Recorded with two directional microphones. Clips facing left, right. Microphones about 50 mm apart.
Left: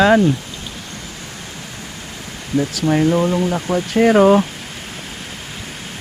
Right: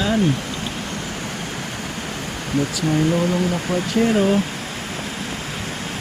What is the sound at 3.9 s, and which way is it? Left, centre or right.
Speech, left.